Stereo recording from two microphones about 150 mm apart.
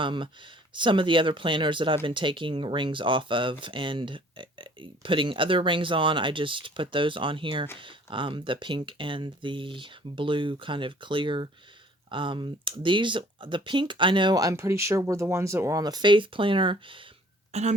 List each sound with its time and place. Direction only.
0.0 s speech: 35° right (ahead or behind)
17.5 s speech: 45° right (ahead or behind)